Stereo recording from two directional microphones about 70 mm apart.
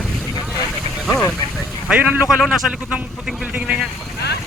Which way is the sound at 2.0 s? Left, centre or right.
Right.